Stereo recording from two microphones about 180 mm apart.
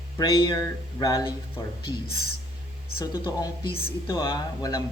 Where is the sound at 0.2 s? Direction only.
25° left (ahead or behind).